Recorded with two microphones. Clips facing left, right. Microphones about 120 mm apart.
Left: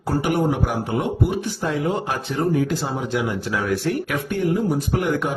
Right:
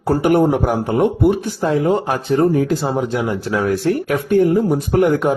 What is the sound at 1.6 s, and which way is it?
Speech, 35° right (ahead or behind).